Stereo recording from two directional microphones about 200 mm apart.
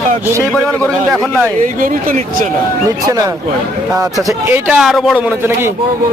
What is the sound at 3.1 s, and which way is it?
Speech, 15° right (ahead or behind).